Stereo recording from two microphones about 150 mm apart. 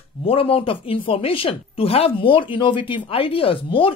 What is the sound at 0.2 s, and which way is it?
Speech, 40° left (ahead or behind).